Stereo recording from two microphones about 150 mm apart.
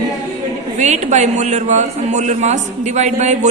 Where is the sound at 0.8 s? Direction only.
50° right (ahead or behind).